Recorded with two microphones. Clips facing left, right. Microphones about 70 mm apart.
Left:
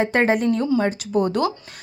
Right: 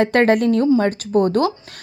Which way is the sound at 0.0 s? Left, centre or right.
Right.